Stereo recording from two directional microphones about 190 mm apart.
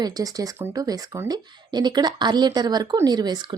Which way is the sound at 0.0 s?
20° right (ahead or behind).